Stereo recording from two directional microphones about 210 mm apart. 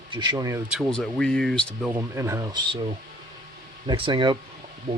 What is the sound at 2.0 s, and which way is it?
Speech, 15° right (ahead or behind).